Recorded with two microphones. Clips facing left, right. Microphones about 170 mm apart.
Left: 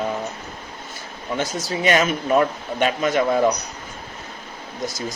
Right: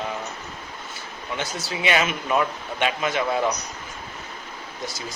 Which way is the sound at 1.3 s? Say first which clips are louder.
Left 5 dB; 40° left (ahead or behind).